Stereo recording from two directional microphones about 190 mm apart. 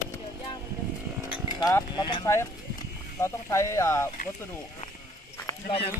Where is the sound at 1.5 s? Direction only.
20° left (ahead or behind).